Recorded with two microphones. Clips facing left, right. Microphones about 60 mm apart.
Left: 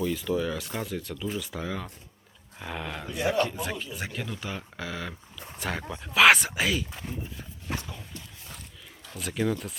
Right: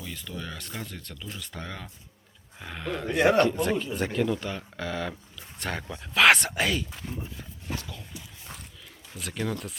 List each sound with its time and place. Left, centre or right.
0.0 s speech: centre
3.1 s speech: right
3.6 s speech: centre
7.8 s horse: left
9.1 s speech: centre